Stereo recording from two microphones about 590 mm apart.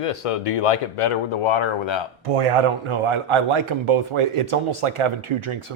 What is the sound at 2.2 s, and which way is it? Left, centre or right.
A man's voice, right.